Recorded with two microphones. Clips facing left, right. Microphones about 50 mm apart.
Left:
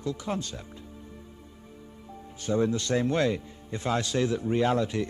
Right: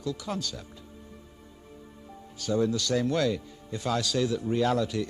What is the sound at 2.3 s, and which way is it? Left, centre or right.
A man's voice, left.